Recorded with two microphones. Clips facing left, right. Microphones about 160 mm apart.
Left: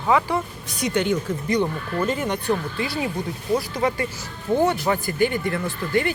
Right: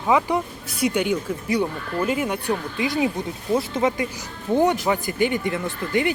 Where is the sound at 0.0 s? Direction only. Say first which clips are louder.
Right 1 dB; 15° right (ahead or behind).